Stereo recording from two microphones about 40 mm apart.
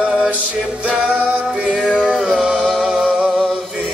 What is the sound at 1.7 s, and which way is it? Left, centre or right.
Music, right.